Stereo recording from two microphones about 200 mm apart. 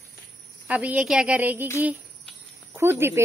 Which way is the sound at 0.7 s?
5° right (ahead or behind).